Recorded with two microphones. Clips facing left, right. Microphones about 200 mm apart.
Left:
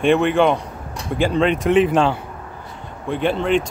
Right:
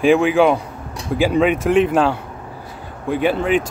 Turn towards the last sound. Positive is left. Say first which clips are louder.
# right 1 dB
turn(degrees=-5)  # may be behind; listen again after turning